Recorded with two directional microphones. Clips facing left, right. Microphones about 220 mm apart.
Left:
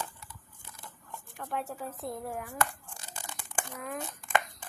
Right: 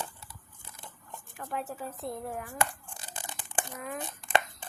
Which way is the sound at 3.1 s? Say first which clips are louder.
Right 1 dB; 15° right (ahead or behind).